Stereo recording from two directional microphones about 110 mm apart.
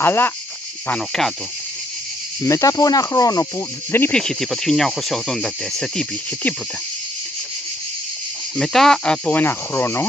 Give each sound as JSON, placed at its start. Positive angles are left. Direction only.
{"t": 0.0, "sound": "speech", "side_deg": 20}
{"t": 2.4, "sound": "speech", "side_deg": 30}
{"t": 4.1, "sound": "cricket", "side_deg": 5}
{"t": 8.5, "sound": "speech", "side_deg": 5}